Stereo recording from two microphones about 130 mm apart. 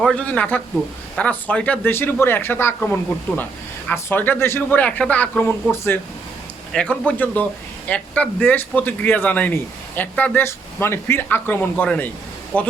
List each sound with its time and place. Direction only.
0.0 s speech: 10° left (ahead or behind)
6.7 s speech: 10° left (ahead or behind)